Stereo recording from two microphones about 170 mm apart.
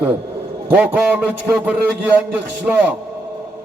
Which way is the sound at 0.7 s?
10° right (ahead or behind).